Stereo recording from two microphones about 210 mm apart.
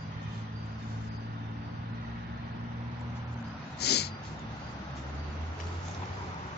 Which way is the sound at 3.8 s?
50° left (ahead or behind).